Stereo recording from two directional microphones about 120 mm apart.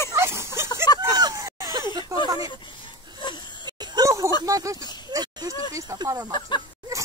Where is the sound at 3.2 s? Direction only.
40° left (ahead or behind).